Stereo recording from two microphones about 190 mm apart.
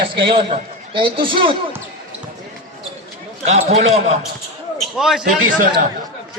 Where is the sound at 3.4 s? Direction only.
35° right (ahead or behind).